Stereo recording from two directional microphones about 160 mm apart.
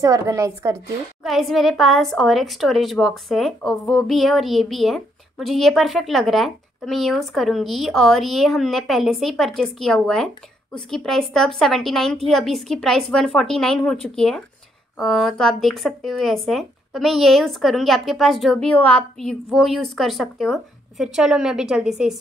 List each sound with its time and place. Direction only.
0.0 s a woman's voice: 20° right (ahead or behind)
1.2 s a woman's voice: centre (ahead or behind)